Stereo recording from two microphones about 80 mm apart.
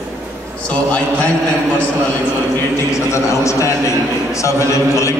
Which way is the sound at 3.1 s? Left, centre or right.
Left.